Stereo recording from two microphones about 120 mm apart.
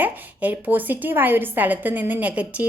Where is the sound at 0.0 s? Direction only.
15° right (ahead or behind).